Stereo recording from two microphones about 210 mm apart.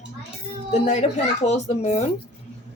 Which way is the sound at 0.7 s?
35° left (ahead or behind).